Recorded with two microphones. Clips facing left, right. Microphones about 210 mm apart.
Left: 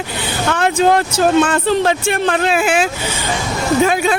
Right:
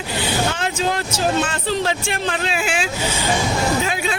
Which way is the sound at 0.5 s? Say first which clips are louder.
Left 9 dB; 60° left (ahead or behind).